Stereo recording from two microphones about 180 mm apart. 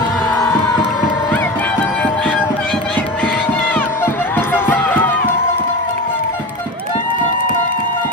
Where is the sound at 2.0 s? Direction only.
5° left (ahead or behind).